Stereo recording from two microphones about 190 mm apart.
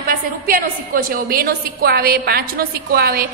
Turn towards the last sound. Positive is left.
turn(degrees=-55)  # may be behind; listen again after turning